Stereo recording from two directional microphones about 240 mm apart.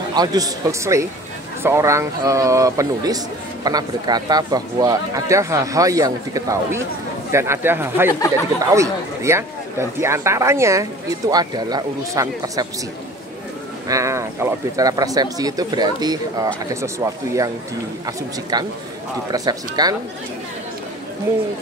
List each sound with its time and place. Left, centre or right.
0.1 s speech: centre
13.8 s speech: centre